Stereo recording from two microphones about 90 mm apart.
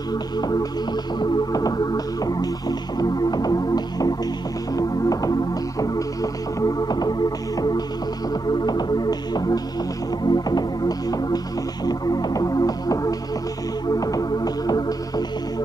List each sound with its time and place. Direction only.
0.4 s music: 50° left (ahead or behind)